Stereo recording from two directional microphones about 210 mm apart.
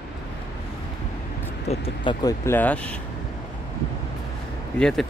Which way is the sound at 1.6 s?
30° left (ahead or behind).